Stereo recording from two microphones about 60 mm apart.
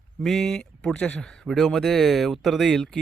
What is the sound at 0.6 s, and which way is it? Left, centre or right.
Speech, centre.